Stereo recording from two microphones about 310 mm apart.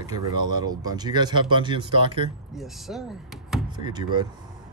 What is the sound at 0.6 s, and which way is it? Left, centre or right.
Speech, centre.